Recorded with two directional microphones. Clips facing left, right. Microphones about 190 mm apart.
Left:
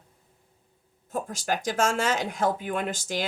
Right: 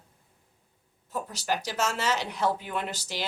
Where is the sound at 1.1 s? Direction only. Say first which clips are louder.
Left 2 dB; 45° left (ahead or behind).